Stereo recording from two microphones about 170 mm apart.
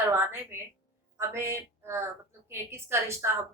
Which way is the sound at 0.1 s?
15° right (ahead or behind).